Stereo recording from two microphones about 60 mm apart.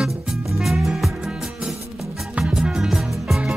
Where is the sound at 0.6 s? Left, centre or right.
Centre.